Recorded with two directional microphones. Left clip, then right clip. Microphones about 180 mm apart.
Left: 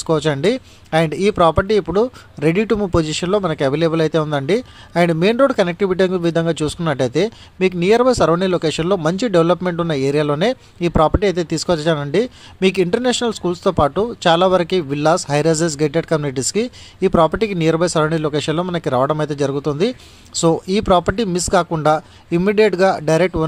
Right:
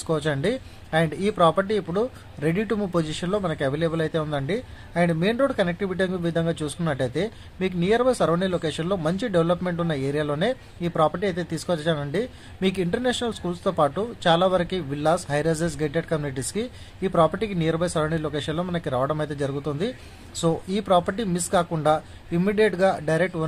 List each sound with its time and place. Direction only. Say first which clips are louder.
0.0 s speech: left 8 dB; 30° left (ahead or behind)